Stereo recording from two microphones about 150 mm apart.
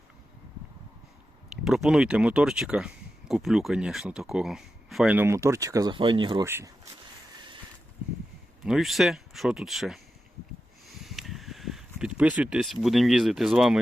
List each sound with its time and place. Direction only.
1.6 s speech: 5° right (ahead or behind)
5.1 s speech: 15° right (ahead or behind); by 6.4 s 30° right (ahead or behind)
6.4 s speech: 15° right (ahead or behind)
8.6 s speech: centre (ahead or behind)
11.0 s a sound: centre (ahead or behind)